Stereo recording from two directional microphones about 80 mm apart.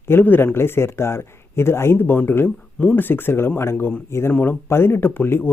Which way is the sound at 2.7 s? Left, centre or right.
Centre.